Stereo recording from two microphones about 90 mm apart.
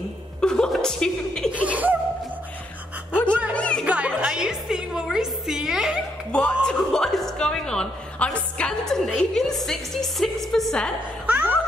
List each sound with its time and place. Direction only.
0.4 s chuckle: 10° left (ahead or behind)
1.5 s laughter: 15° right (ahead or behind)
3.3 s music: 20° right (ahead or behind)
3.5 s music: 15° left (ahead or behind)
3.8 s music: 15° right (ahead or behind)
6.3 s a woman's voice: 10° left (ahead or behind)
11.2 s a sound: 20° right (ahead or behind)